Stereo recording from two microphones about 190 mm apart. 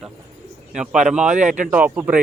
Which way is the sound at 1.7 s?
10° right (ahead or behind).